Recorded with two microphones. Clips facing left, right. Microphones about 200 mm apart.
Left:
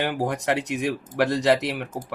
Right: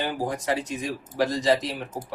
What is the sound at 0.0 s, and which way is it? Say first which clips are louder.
Speech: left 3 dB; 65° left (ahead or behind).